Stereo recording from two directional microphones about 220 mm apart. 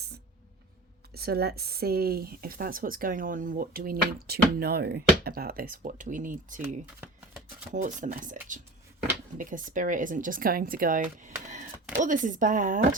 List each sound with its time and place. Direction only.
1.1 s speech: 45° right (ahead or behind)
7.7 s speech: 35° right (ahead or behind)